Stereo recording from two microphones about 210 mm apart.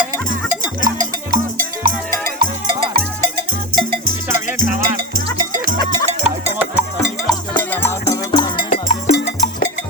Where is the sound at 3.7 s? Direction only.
45° right (ahead or behind).